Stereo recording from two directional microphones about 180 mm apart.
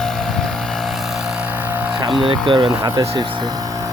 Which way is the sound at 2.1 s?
Centre (ahead or behind).